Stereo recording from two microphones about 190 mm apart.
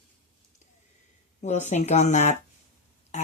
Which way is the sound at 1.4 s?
35° left (ahead or behind).